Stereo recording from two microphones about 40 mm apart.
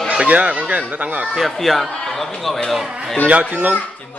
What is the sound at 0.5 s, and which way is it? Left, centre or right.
Speech, right.